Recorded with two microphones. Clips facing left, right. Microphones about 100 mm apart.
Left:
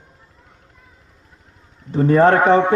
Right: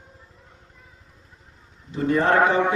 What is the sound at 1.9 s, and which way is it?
Speech, 40° left (ahead or behind).